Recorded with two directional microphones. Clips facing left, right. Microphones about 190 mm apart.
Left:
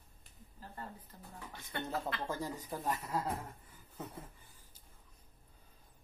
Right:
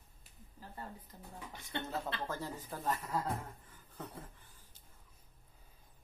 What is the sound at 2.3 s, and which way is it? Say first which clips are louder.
Speech: left 2 dB; 15° left (ahead or behind).